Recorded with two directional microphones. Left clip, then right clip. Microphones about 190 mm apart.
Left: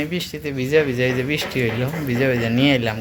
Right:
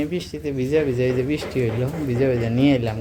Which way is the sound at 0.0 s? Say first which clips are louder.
Left 1 dB; 10° right (ahead or behind).